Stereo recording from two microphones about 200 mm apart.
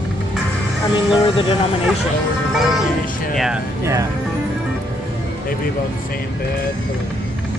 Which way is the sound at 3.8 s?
15° right (ahead or behind).